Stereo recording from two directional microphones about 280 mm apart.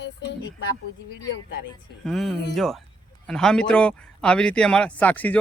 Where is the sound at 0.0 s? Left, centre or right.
Left.